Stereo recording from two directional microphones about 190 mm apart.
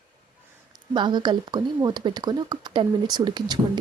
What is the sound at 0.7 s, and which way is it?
Speech, 25° right (ahead or behind).